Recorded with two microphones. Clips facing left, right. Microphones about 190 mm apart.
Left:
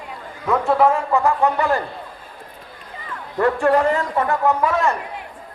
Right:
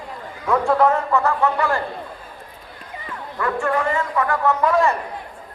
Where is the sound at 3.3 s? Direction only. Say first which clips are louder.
Left 5 dB; 35° left (ahead or behind).